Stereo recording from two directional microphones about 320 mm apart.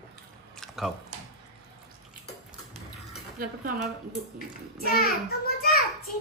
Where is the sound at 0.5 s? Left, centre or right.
Centre.